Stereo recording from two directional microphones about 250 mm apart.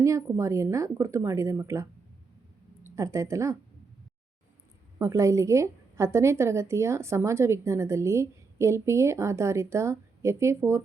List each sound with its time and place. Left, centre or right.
0.0 s a woman's voice: centre
4.9 s a woman's voice: centre